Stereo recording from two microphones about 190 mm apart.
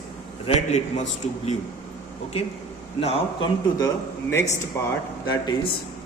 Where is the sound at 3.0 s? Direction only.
30° left (ahead or behind); by 4.6 s 15° left (ahead or behind).